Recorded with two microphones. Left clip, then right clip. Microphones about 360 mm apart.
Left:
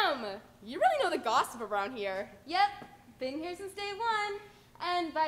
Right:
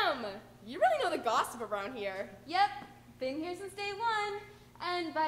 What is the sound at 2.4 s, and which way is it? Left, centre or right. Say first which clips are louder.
A woman's voice: left 1 dB; left.